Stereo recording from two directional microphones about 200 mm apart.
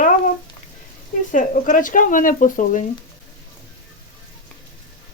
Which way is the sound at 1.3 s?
40° left (ahead or behind).